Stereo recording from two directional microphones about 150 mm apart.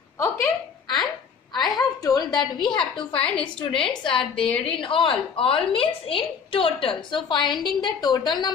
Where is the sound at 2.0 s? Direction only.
25° left (ahead or behind).